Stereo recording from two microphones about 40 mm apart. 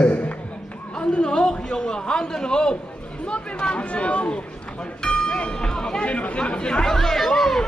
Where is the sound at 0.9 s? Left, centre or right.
Left.